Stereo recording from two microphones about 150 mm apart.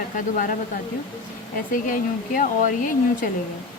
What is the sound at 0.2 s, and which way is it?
Speech, 65° left (ahead or behind).